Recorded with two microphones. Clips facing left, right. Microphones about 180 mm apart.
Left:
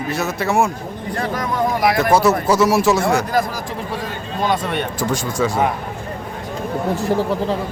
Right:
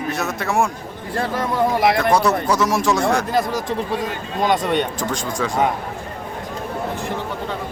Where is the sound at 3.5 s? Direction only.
20° right (ahead or behind).